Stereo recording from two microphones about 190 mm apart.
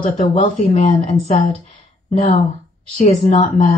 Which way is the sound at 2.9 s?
35° left (ahead or behind).